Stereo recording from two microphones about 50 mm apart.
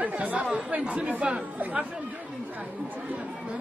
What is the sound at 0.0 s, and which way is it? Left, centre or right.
Speech, right.